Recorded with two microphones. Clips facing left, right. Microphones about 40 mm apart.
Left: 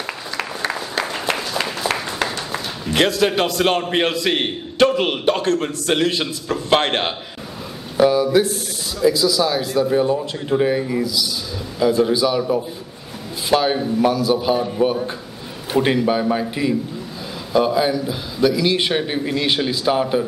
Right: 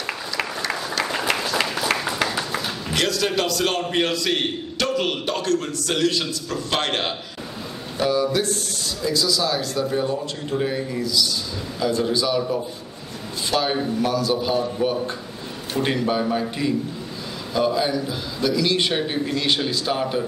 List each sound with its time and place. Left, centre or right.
1.0 s applause: centre
2.9 s a man's voice: left
8.0 s a sound: centre
9.0 s a man's voice: centre